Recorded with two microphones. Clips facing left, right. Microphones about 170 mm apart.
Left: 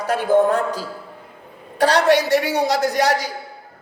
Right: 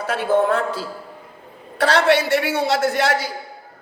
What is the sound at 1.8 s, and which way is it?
A man's voice, 15° left (ahead or behind).